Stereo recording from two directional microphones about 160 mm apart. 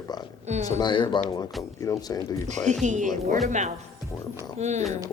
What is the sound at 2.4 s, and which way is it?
Speech, 45° right (ahead or behind).